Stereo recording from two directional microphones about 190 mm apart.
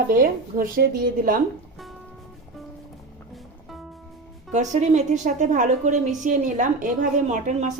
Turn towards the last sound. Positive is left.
turn(degrees=-40)  # may be behind; listen again after turning